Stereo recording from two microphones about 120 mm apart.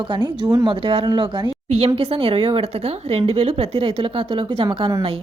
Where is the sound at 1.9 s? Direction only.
55° right (ahead or behind).